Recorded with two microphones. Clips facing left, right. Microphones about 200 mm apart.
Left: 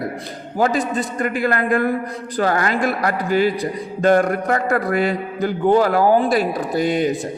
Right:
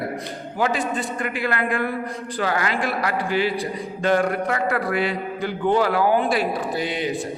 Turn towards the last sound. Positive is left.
turn(degrees=45)  # may be behind; listen again after turning